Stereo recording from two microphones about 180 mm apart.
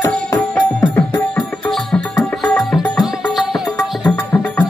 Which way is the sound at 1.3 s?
5° left (ahead or behind).